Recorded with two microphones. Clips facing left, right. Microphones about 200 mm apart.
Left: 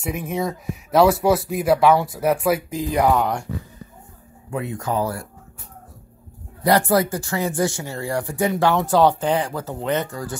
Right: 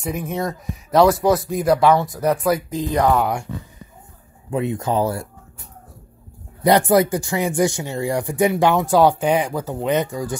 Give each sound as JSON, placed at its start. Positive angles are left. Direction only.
{"t": 0.0, "sound": "speech", "side_deg": 5}
{"t": 3.2, "sound": "speech", "side_deg": -10}
{"t": 4.5, "sound": "speech", "side_deg": -20}
{"t": 6.6, "sound": "speech", "side_deg": -20}